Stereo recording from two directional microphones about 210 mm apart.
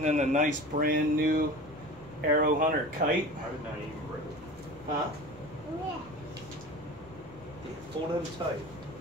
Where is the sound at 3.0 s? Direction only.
35° right (ahead or behind).